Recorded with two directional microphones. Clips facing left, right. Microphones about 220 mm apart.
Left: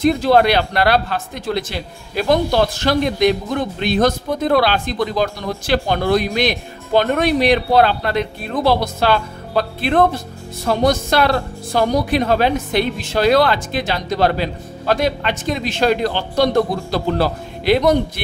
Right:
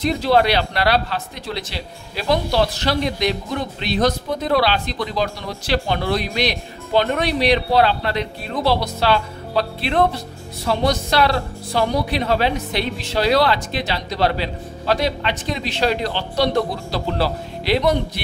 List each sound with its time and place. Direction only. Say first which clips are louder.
0.0 s speech: left 4 dB; 50° left (ahead or behind)